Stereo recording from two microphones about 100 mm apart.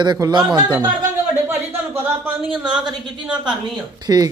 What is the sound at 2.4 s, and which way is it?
Speech, 50° right (ahead or behind).